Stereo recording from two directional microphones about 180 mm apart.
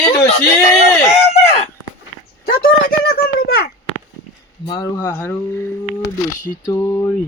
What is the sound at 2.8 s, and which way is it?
Speech, 55° left (ahead or behind).